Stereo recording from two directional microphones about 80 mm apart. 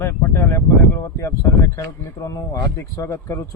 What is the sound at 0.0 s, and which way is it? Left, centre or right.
Speech, left.